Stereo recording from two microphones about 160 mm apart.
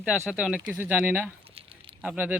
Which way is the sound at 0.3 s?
5° right (ahead or behind).